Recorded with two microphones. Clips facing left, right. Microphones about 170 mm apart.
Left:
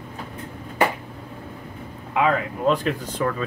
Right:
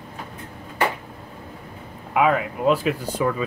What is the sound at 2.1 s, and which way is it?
Speech, 10° right (ahead or behind).